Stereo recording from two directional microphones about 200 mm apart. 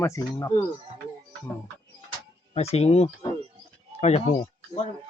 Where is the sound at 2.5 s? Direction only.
30° left (ahead or behind).